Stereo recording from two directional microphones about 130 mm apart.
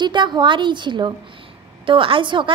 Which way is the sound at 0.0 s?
35° right (ahead or behind).